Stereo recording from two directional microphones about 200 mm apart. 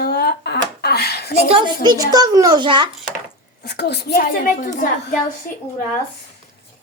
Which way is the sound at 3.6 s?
55° left (ahead or behind).